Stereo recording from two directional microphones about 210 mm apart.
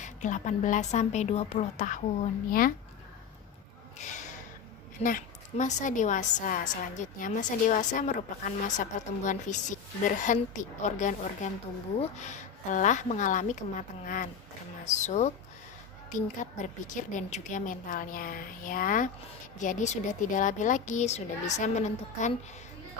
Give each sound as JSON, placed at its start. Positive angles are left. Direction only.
{"t": 0.0, "sound": "a woman's voice", "side_deg": 35}
{"t": 3.9, "sound": "a sound", "side_deg": 35}
{"t": 5.0, "sound": "a woman's voice", "side_deg": 40}